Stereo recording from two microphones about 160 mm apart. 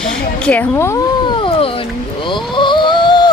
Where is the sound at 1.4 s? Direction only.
35° left (ahead or behind).